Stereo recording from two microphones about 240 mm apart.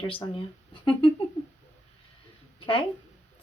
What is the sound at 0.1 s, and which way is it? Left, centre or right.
Speech, left.